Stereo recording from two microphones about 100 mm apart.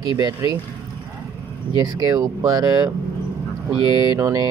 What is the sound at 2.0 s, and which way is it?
Speech, 40° right (ahead or behind).